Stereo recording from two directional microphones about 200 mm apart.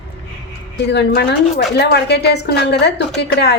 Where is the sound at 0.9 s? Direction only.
55° left (ahead or behind).